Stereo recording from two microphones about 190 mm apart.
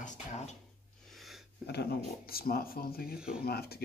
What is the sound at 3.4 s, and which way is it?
Speech, 55° left (ahead or behind).